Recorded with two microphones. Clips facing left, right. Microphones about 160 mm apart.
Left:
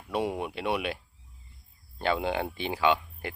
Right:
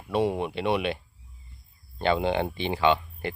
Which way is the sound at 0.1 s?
10° left (ahead or behind).